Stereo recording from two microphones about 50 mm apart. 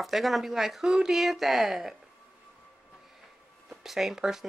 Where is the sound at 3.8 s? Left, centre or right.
Centre.